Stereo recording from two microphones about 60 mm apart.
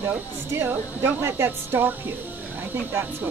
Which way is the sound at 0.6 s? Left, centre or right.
Right.